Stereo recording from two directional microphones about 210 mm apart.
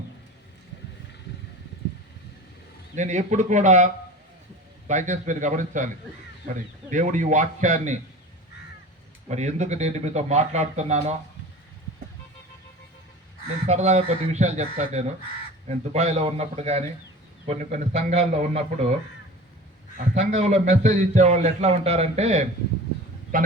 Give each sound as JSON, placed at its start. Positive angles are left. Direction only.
{"t": 2.9, "sound": "a man's voice", "side_deg": -35}
{"t": 4.9, "sound": "a man's voice", "side_deg": -35}
{"t": 9.3, "sound": "a man's voice", "side_deg": -35}
{"t": 13.7, "sound": "a man's voice", "side_deg": -35}
{"t": 20.1, "sound": "a man's voice", "side_deg": -35}